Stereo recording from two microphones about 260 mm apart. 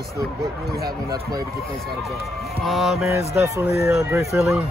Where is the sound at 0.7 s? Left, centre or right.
Right.